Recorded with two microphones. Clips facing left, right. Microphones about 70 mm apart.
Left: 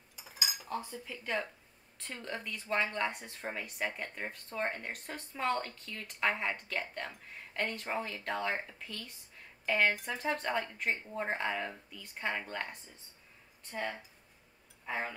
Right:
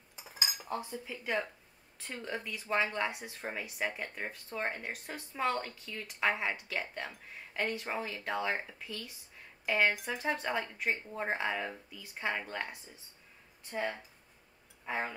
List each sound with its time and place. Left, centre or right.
0.7 s speech: centre